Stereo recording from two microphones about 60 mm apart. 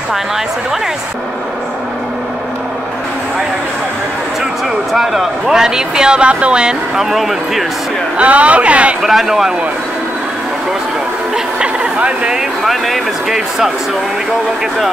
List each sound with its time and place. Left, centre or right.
4.9 s speech: centre
8.2 s a man's voice: right
9.0 s speech: centre
11.3 s speech: centre
12.4 s speech: centre